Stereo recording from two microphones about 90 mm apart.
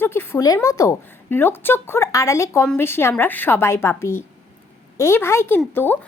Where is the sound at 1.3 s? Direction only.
25° left (ahead or behind).